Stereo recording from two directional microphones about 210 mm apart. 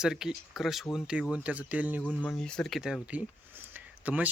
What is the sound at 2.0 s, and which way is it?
Speech, 5° left (ahead or behind).